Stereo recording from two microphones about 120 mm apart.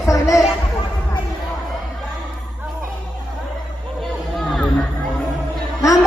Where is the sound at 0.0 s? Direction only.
25° left (ahead or behind).